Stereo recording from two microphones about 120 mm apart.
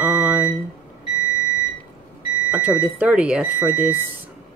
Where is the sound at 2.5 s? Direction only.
15° right (ahead or behind).